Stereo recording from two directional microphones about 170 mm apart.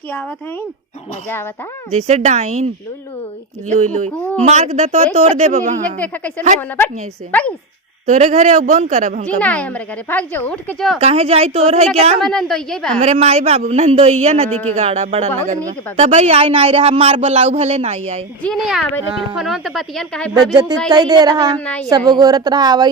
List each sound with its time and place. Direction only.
1.9 s a woman's voice: 40° right (ahead or behind)
3.7 s a woman's voice: 45° right (ahead or behind)
6.0 s speech: 10° left (ahead or behind)
8.0 s a woman's voice: 45° right (ahead or behind)
9.2 s speech: 10° left (ahead or behind)
11.0 s a woman's voice: 35° right (ahead or behind)
12.2 s speech: 5° left (ahead or behind)
13.0 s a woman's voice: 40° right (ahead or behind)
14.5 s speech: 10° left (ahead or behind)
14.8 s a woman's voice: 40° right (ahead or behind)
18.4 s speech: centre (ahead or behind)
20.3 s speech: 25° right (ahead or behind)